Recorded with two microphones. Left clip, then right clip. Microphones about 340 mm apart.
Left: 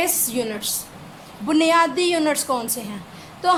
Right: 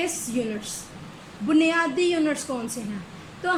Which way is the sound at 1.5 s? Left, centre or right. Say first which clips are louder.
Left 4 dB; centre.